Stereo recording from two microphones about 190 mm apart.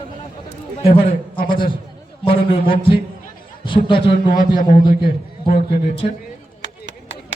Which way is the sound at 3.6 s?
25° left (ahead or behind).